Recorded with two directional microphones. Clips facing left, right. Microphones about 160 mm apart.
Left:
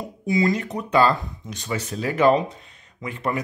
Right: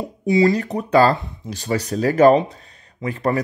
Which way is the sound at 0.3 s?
35° right (ahead or behind).